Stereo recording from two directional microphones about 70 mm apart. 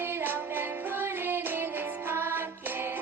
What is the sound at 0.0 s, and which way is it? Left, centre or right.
Music, right.